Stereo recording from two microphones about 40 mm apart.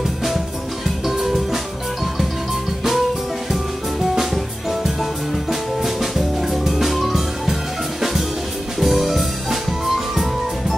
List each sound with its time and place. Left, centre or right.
1.0 s music: centre
4.1 s music: centre
8.7 s music: centre